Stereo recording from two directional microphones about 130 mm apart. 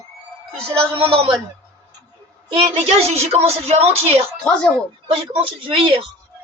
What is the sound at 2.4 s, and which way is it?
A woman's voice, 45° right (ahead or behind).